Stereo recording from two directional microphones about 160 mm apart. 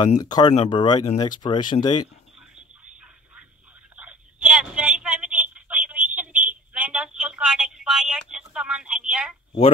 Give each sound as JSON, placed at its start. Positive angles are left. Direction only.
{"t": 0.2, "sound": "speech", "side_deg": 25}
{"t": 3.9, "sound": "a sound", "side_deg": -5}
{"t": 6.7, "sound": "telephone", "side_deg": -5}